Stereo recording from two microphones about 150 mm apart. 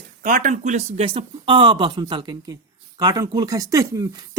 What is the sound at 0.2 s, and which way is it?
Speech, 60° right (ahead or behind).